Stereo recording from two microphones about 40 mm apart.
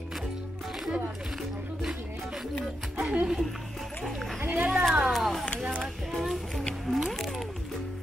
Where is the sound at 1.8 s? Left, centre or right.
Centre.